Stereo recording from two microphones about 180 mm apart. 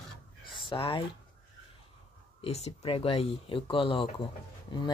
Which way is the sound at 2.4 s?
35° left (ahead or behind).